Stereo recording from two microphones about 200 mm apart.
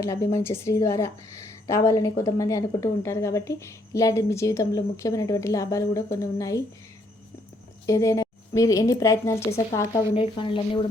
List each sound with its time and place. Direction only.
0.0 s a woman's voice: 15° left (ahead or behind)
7.9 s a woman's voice: 15° left (ahead or behind)